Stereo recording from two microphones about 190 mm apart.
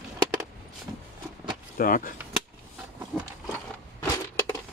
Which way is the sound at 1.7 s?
45° left (ahead or behind).